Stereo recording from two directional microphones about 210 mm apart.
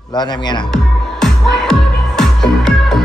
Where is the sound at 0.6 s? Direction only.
Centre (ahead or behind).